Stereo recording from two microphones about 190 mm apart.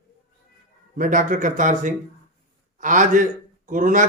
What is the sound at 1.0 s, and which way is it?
A man's voice, 45° right (ahead or behind).